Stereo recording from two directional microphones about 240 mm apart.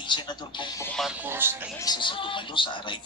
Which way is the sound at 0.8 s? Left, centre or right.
Centre.